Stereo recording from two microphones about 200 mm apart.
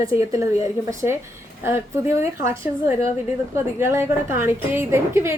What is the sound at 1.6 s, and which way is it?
A woman's voice, 10° right (ahead or behind).